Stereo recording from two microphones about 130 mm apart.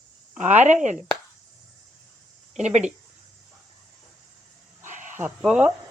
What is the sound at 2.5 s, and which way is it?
Speech, 60° right (ahead or behind).